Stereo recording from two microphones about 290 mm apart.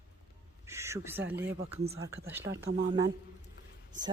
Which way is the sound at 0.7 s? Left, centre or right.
Centre.